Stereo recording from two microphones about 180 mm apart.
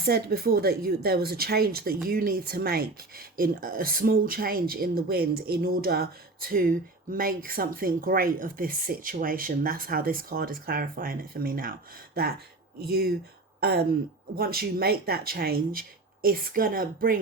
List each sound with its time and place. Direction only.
0.0 s speech: 60° right (ahead or behind)